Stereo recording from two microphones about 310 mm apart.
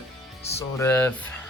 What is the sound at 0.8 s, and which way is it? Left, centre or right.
Speech, centre.